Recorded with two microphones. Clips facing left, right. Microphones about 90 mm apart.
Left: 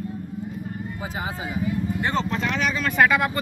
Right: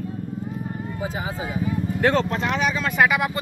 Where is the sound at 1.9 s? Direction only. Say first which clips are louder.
Right 8 dB; 70° right (ahead or behind).